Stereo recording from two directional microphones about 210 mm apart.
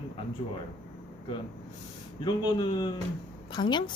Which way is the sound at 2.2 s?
20° left (ahead or behind).